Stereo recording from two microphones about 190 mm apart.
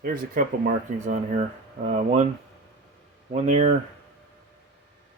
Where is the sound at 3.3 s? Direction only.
40° right (ahead or behind).